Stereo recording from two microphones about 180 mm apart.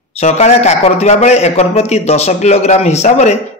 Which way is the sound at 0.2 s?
40° left (ahead or behind).